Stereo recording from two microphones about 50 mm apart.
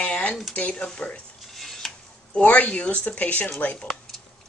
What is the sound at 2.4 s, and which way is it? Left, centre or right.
Speech, left.